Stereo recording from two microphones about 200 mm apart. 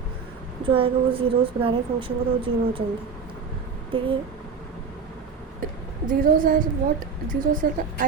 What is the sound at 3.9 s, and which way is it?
Speech, 25° right (ahead or behind).